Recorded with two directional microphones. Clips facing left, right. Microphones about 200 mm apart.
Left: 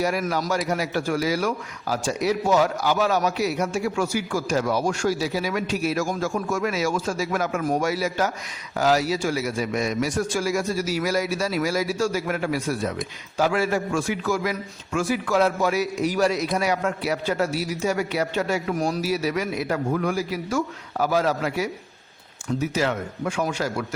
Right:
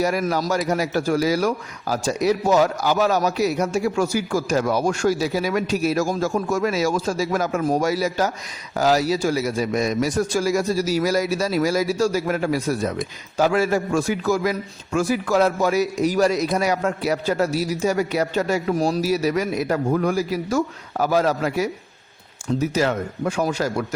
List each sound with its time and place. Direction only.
0.0 s speech: 40° right (ahead or behind)